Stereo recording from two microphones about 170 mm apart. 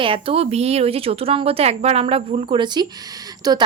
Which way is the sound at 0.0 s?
30° right (ahead or behind).